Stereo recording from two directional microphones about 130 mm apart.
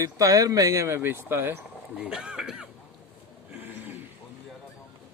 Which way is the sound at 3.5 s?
15° right (ahead or behind).